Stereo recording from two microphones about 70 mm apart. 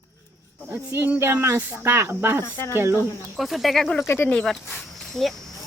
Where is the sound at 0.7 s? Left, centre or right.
Right.